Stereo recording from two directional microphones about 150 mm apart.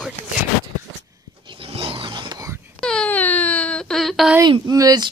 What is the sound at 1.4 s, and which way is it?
Roaring cats, 35° right (ahead or behind).